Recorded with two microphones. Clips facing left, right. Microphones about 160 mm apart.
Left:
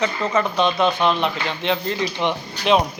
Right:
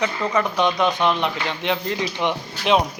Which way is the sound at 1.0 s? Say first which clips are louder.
Even; 20° left (ahead or behind).